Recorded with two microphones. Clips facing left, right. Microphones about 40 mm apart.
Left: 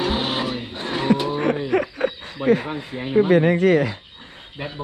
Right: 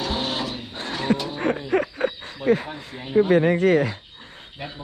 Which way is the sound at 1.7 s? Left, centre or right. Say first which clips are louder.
Left 1 dB; left.